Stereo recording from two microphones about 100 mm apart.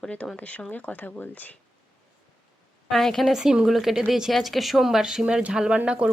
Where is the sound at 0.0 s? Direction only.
15° left (ahead or behind).